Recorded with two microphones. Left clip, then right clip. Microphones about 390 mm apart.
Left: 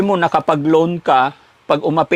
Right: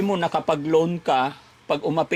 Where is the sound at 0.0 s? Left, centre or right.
Left.